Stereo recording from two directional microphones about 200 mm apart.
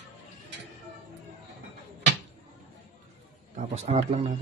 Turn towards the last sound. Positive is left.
turn(degrees=-30)  # may be behind; listen again after turning